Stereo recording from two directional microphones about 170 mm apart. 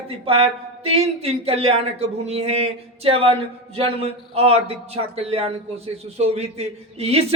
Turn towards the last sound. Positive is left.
turn(degrees=-35)  # may be behind; listen again after turning